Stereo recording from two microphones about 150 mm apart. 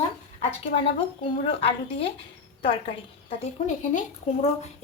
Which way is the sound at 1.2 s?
40° left (ahead or behind).